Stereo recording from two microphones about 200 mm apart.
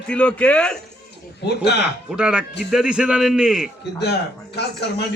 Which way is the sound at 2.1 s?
5° right (ahead or behind).